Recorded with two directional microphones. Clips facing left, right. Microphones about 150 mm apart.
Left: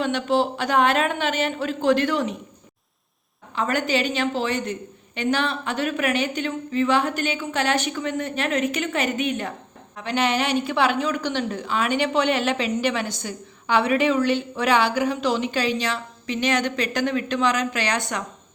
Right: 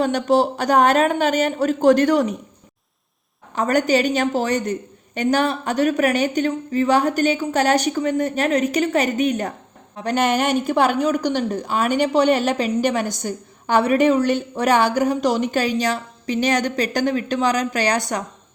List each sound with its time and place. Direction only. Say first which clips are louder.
0.0 s a woman's voice: right 4 dB; 40° right (ahead or behind)
3.5 s a woman's voice: right 5 dB; 40° right (ahead or behind)